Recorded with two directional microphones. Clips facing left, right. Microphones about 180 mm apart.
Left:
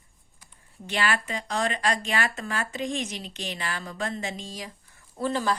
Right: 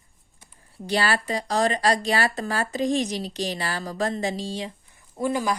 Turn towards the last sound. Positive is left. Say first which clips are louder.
# right 2 dB
turn(degrees=-15)  # may be behind; listen again after turning